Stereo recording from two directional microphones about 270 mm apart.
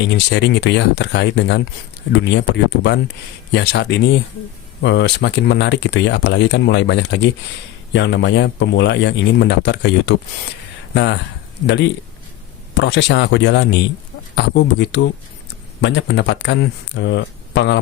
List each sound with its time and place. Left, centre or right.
0.1 s speech: left